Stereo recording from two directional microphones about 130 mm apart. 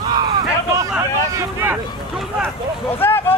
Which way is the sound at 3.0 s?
15° left (ahead or behind).